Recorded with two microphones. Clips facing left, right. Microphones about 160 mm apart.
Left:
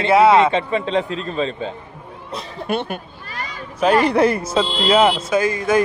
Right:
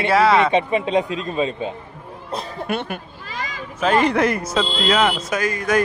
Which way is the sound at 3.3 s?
90° right.